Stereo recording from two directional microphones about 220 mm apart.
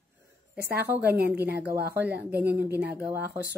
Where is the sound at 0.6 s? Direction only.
45° right (ahead or behind).